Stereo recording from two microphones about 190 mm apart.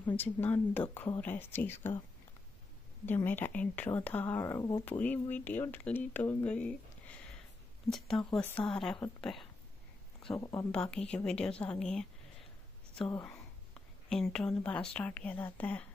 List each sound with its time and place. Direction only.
0.0 s speech: 10° left (ahead or behind)
3.1 s a woman's voice: 10° left (ahead or behind)
10.3 s speech: 15° left (ahead or behind)
10.7 s a woman's voice: 5° left (ahead or behind)
13.1 s a woman's voice: 10° left (ahead or behind)